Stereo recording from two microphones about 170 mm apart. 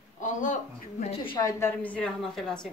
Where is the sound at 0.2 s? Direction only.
50° left (ahead or behind).